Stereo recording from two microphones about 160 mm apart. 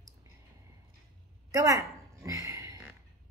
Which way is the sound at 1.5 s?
20° right (ahead or behind).